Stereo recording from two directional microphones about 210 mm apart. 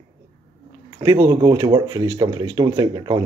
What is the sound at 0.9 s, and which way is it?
Speech, 20° right (ahead or behind).